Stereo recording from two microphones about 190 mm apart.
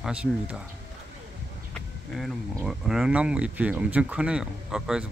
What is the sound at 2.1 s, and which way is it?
Speech, centre (ahead or behind).